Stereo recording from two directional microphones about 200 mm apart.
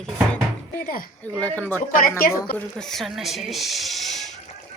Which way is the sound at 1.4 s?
10° left (ahead or behind).